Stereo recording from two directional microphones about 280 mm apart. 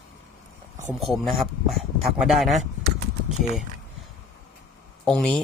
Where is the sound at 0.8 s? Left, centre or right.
Centre.